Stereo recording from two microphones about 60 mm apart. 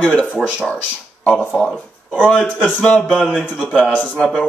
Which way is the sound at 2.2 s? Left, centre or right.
Left.